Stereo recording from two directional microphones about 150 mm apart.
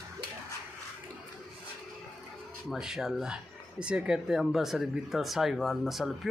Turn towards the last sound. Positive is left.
turn(degrees=0)  # may be behind; listen again after turning